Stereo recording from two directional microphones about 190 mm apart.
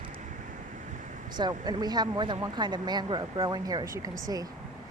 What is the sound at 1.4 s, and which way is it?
Speech, 20° right (ahead or behind).